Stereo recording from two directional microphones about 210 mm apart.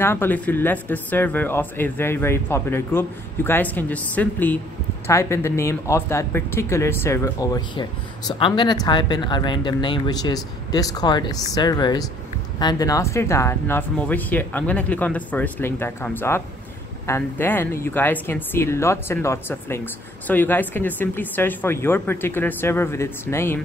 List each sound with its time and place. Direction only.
0.0 s speech: 10° left (ahead or behind)